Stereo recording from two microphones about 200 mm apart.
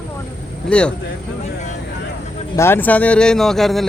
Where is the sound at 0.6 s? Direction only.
5° left (ahead or behind).